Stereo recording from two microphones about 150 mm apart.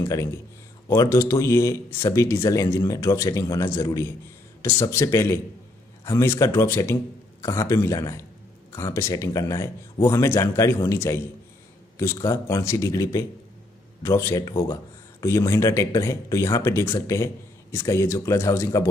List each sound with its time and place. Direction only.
0.0 s speech: 20° left (ahead or behind)